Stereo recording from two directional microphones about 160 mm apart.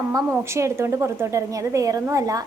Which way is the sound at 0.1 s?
15° right (ahead or behind).